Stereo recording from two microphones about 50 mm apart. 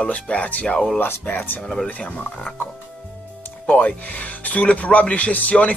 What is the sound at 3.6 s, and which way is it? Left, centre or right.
Speech, centre.